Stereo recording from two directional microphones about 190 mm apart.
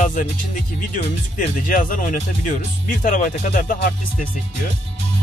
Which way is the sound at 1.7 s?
45° left (ahead or behind).